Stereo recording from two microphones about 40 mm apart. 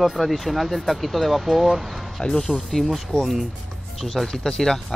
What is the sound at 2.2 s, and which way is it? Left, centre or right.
Speech, centre.